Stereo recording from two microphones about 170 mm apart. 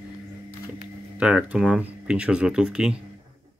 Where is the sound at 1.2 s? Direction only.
5° right (ahead or behind).